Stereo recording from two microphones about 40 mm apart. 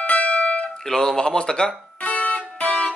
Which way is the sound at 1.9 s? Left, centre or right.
Left.